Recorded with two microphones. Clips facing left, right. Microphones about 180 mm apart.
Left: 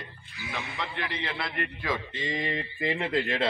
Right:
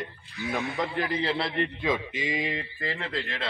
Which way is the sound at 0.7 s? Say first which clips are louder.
Right 6 dB; 40° right (ahead or behind).